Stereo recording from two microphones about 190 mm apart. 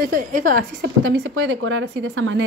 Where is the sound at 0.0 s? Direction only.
45° right (ahead or behind).